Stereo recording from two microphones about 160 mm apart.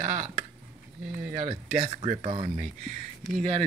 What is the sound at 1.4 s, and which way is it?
Speech, 35° right (ahead or behind).